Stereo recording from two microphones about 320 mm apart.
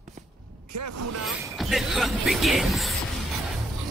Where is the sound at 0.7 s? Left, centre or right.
Right.